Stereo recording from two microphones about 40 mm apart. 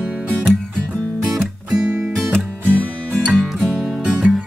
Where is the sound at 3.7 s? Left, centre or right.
Centre.